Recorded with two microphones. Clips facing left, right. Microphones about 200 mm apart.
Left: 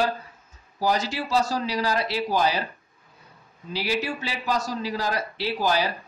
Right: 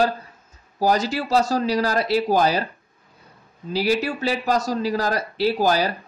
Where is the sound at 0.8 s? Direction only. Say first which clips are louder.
Right 4 dB; 45° right (ahead or behind).